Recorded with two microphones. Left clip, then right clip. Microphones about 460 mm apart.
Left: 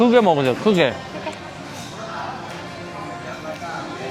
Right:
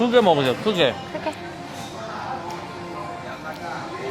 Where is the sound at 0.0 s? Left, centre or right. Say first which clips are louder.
Left 2 dB; left.